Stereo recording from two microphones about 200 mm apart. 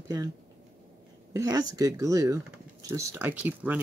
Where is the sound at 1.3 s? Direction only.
15° right (ahead or behind).